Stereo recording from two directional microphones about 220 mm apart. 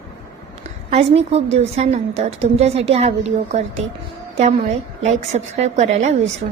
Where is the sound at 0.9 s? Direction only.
30° right (ahead or behind).